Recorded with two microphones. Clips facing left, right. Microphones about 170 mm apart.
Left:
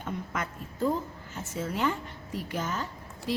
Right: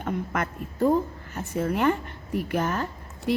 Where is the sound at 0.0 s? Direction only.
60° right (ahead or behind).